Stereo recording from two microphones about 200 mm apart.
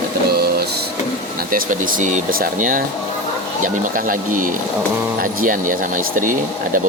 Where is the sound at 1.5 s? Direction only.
45° right (ahead or behind).